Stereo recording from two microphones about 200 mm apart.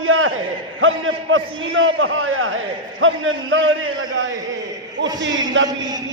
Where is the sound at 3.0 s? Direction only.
75° right (ahead or behind).